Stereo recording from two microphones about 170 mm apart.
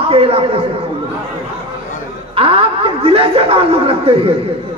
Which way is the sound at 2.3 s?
35° right (ahead or behind).